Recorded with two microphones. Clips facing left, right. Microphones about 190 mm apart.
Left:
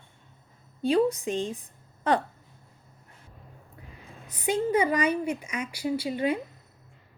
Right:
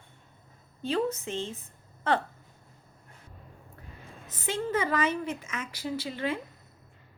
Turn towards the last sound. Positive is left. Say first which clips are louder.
# left 5 dB
turn(degrees=15)  # may be behind; listen again after turning